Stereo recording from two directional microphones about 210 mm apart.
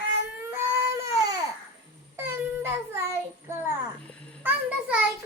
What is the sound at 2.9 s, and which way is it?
Child singing, 15° right (ahead or behind).